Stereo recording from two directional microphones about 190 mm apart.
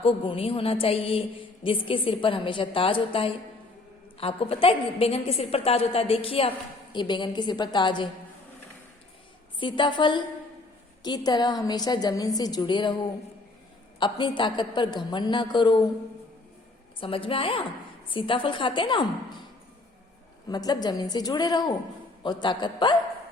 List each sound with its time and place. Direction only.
0.0 s a woman's voice: 30° left (ahead or behind)
9.6 s a woman's voice: 25° left (ahead or behind)
14.0 s a woman's voice: 25° left (ahead or behind)
17.0 s a woman's voice: 30° left (ahead or behind)
20.5 s a woman's voice: 20° left (ahead or behind)